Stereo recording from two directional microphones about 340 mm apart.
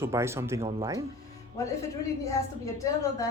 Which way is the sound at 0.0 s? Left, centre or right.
Centre.